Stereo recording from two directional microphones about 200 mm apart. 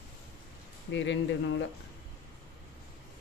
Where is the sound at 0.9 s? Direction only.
65° left (ahead or behind).